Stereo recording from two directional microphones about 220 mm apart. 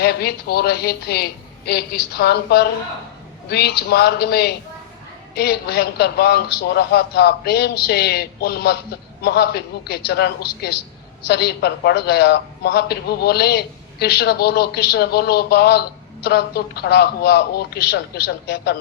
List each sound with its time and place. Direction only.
0.0 s a woman's voice: 45° left (ahead or behind)